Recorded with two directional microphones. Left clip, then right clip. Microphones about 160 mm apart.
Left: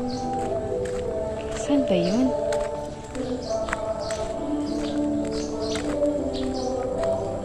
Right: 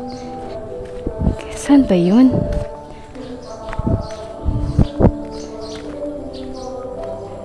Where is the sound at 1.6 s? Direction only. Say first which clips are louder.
Right 8 dB; 55° right (ahead or behind).